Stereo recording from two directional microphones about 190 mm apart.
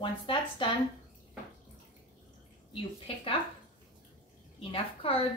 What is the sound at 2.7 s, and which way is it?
Speech, 30° left (ahead or behind).